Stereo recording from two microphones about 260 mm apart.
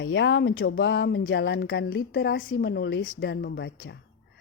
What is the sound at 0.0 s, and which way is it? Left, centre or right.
A woman's voice, left.